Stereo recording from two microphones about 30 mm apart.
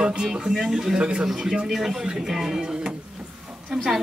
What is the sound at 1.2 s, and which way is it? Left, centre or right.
Speech, centre.